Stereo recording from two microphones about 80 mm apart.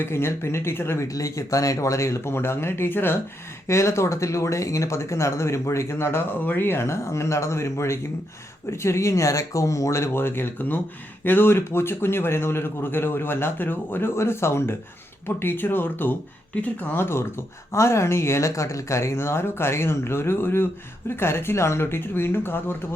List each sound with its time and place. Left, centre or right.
0.0 s speech: left
1.0 s a man's voice: left